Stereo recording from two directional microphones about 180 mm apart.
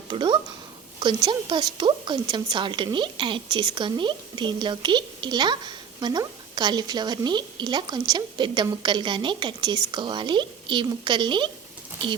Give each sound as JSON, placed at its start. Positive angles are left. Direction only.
{"t": 0.1, "sound": "a woman's voice", "side_deg": -25}